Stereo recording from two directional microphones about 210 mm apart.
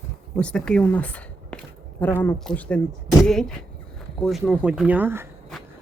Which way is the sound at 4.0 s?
Centre (ahead or behind).